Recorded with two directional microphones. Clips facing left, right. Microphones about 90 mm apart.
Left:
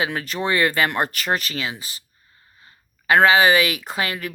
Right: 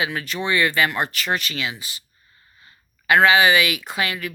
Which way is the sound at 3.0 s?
35° left (ahead or behind).